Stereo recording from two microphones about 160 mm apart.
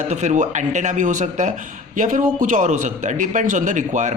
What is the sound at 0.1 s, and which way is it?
Speech, 45° right (ahead or behind).